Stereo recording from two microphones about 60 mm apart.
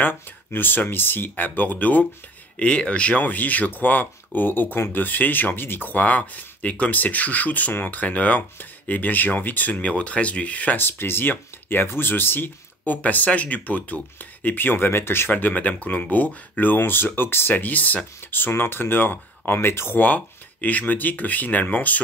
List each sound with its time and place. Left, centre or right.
0.0 s speech: left
2.6 s speech: centre
10.8 s speech: left
20.0 s speech: left